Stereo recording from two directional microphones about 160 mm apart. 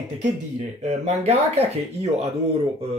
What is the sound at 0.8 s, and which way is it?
Speech, 45° right (ahead or behind).